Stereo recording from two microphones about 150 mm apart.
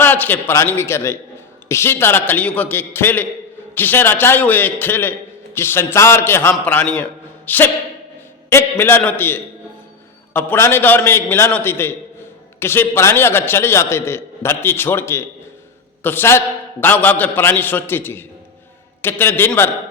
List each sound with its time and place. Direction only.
0.0 s a man's voice: 15° left (ahead or behind)